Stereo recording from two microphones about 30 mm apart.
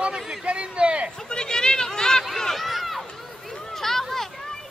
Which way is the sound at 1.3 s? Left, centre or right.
Left.